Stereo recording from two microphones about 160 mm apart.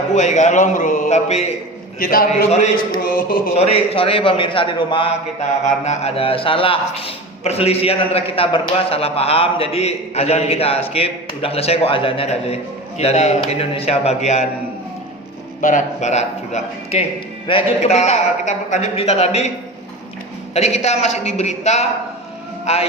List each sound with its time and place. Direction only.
0.1 s a man's voice: 50° left (ahead or behind)
2.0 s music: 65° left (ahead or behind)
3.6 s a man's voice: 35° left (ahead or behind)
5.6 s a man's voice: 45° left (ahead or behind)
15.6 s a man's voice: 50° left (ahead or behind)
20.5 s a man's voice: 45° left (ahead or behind)